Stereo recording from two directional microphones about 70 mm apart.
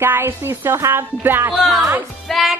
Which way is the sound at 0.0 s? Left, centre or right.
Right.